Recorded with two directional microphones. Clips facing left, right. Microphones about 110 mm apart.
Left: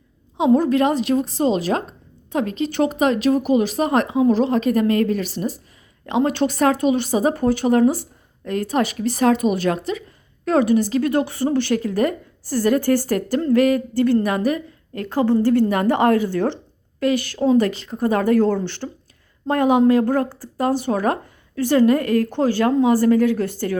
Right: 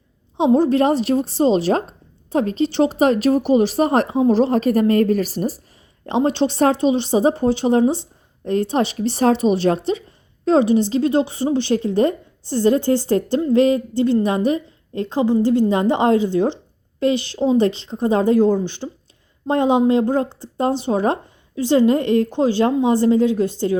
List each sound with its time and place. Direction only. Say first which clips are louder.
0.3 s a woman's voice: right 1 dB; 30° right (ahead or behind)
6.1 s a woman's voice: right 1 dB; 30° right (ahead or behind)